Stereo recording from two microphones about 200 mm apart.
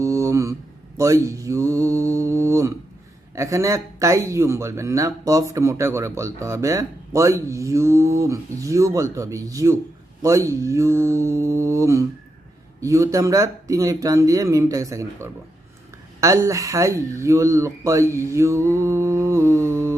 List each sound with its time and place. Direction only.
0.0 s a sound: 15° right (ahead or behind)
0.9 s mantra: 15° right (ahead or behind)
3.3 s speech: 15° right (ahead or behind)